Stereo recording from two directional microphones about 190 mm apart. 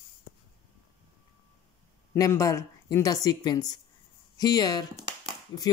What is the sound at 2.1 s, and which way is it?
Speech, 15° left (ahead or behind).